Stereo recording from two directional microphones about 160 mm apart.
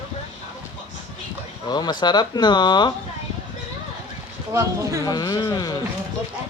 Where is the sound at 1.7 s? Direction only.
25° left (ahead or behind).